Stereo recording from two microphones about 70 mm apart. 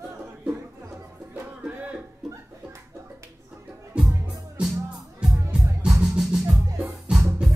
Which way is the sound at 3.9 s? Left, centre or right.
Centre.